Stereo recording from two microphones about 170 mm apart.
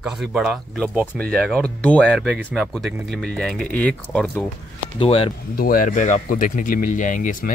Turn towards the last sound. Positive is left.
turn(degrees=50)  # may be behind; listen again after turning